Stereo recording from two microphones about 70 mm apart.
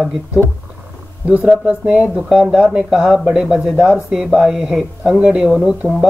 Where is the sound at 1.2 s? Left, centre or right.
Right.